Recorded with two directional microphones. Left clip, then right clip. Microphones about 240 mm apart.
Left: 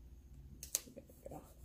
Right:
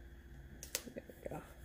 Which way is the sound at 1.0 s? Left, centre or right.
Right.